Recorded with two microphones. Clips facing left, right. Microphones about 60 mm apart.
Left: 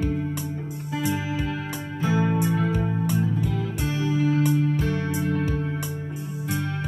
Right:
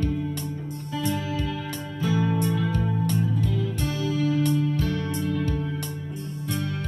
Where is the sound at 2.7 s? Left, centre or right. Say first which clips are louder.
Left 1 dB; centre.